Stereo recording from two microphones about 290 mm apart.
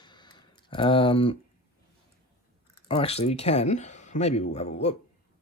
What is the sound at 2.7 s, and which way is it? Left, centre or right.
A man's voice, centre.